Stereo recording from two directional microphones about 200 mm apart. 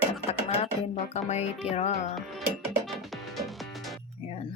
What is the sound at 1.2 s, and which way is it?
Speech, 35° left (ahead or behind).